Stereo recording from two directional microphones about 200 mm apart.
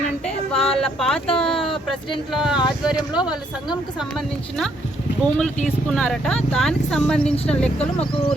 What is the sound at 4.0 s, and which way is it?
Speech, centre (ahead or behind).